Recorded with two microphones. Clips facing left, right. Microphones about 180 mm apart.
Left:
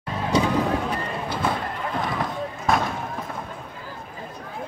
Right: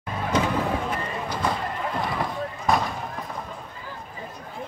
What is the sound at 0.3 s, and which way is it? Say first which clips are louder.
Vehicle: left 3 dB; 15° left (ahead or behind).